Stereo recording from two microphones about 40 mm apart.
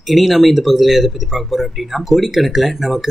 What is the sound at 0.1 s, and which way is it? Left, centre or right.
Speech, centre.